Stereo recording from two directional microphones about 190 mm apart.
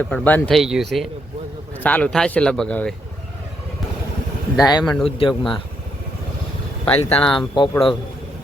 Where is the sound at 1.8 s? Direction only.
5° left (ahead or behind).